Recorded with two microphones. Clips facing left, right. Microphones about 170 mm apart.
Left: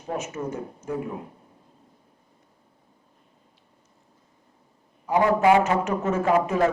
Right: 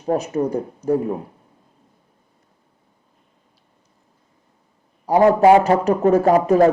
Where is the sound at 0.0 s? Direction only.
40° right (ahead or behind).